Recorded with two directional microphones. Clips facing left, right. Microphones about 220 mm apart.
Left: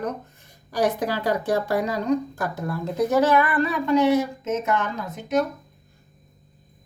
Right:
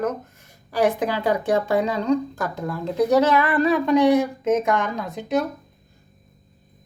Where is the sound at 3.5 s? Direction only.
20° right (ahead or behind).